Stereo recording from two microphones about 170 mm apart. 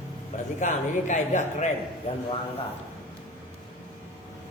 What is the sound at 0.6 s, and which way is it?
A man's voice, 45° left (ahead or behind).